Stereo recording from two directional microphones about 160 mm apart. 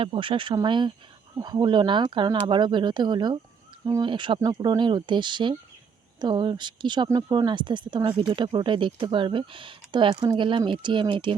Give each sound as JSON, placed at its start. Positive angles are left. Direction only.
{"t": 0.0, "sound": "speech", "side_deg": -30}